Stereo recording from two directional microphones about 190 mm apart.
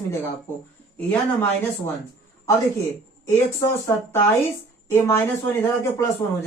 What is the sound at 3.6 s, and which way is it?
Speech, 15° left (ahead or behind).